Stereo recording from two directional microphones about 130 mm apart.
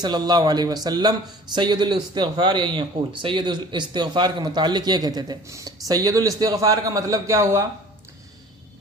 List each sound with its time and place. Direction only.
0.0 s a man's voice: 35° right (ahead or behind)